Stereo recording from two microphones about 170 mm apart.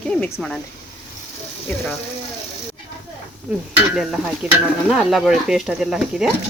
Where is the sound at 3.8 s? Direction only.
Centre (ahead or behind).